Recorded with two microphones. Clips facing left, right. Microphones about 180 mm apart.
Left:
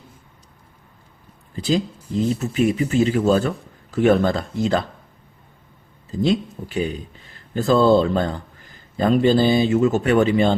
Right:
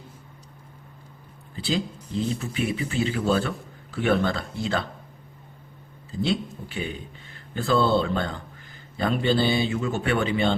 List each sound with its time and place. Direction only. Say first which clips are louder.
1.5 s speech: left 6 dB; 40° left (ahead or behind)
6.1 s speech: left 6 dB; 40° left (ahead or behind)